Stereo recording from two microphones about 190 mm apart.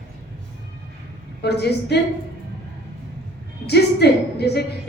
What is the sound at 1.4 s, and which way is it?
Speech, 60° left (ahead or behind).